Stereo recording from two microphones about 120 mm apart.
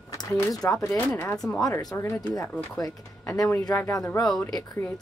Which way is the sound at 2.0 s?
20° left (ahead or behind).